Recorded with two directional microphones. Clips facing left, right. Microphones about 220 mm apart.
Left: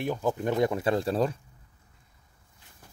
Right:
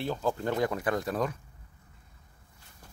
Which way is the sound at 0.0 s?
15° left (ahead or behind).